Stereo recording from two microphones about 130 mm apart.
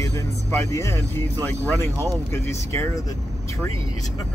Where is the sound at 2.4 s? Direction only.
20° left (ahead or behind).